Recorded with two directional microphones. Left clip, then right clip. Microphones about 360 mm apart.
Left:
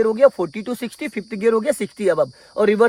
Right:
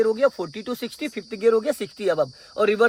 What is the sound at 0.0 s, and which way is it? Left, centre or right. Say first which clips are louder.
Speech: left 5 dB; centre.